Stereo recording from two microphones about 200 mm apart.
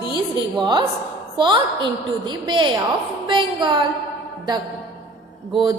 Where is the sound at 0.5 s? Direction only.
20° right (ahead or behind).